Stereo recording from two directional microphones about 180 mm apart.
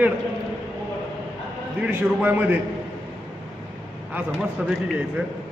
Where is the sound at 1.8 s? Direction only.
10° right (ahead or behind).